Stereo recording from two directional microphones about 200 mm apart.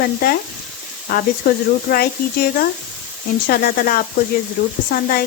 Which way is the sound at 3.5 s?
45° left (ahead or behind).